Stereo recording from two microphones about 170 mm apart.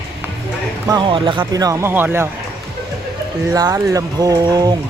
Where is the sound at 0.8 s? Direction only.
25° right (ahead or behind).